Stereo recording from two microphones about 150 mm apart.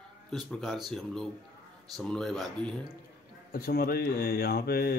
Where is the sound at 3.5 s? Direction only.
90° left.